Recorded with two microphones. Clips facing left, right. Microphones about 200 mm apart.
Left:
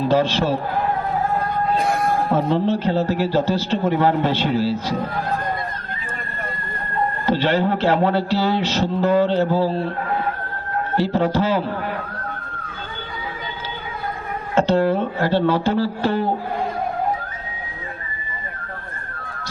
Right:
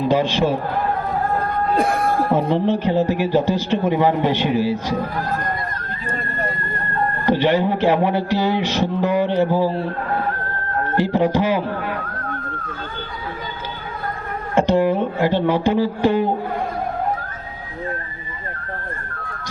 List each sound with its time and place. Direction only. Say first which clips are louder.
0.0 s a man's voice: right 1 dB; 15° right (ahead or behind)
2.3 s a man's voice: right 1 dB; 15° right (ahead or behind)
7.3 s a man's voice: right 2 dB; 15° right (ahead or behind)
10.9 s a man's voice: right 1 dB; 15° right (ahead or behind)
14.5 s a man's voice: right 1 dB; 15° right (ahead or behind)